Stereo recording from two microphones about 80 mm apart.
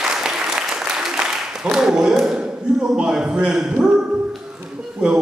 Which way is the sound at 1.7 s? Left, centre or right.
Centre.